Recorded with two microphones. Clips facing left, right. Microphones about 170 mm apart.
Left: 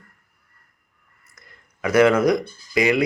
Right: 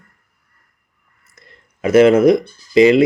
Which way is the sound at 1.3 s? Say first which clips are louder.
Right 3 dB; 25° right (ahead or behind).